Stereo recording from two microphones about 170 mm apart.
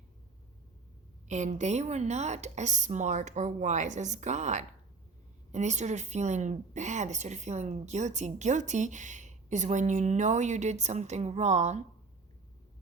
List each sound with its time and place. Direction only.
1.3 s a woman's voice: 45° right (ahead or behind)